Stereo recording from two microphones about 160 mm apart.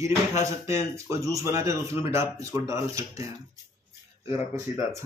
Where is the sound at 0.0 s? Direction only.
20° right (ahead or behind).